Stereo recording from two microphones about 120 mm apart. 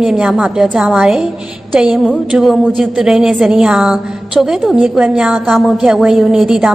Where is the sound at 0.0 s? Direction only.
5° right (ahead or behind).